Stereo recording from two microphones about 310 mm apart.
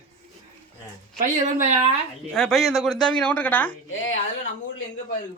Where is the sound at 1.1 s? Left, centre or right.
Right.